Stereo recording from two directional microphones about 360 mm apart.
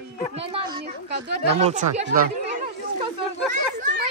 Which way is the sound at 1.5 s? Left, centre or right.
Centre.